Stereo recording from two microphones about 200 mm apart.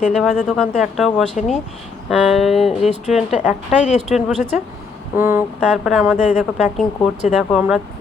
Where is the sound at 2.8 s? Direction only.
35° left (ahead or behind).